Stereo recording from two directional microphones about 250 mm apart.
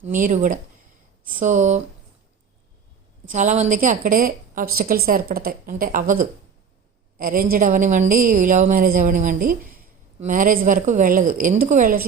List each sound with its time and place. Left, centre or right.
0.0 s a woman's voice: right
3.2 s a woman's voice: right